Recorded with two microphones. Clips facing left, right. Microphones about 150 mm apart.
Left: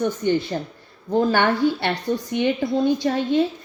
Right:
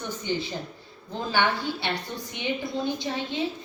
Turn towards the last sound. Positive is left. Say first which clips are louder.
# left 10 dB
turn(degrees=55)  # may be behind; listen again after turning